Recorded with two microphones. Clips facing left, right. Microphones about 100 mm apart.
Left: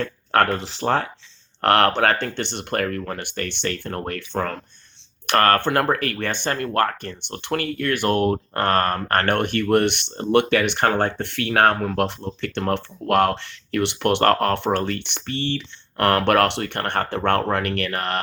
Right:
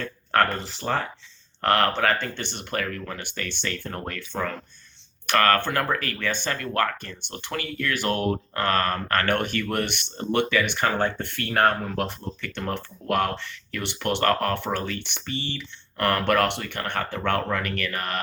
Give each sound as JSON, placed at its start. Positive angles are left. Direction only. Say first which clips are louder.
{"t": 0.0, "sound": "speech", "louder": "left 3 dB", "side_deg": 65}
{"t": 5.2, "sound": "speech", "louder": "left 3 dB", "side_deg": 45}